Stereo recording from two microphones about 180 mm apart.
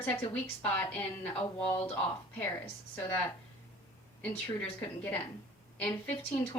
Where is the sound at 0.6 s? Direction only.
10° left (ahead or behind).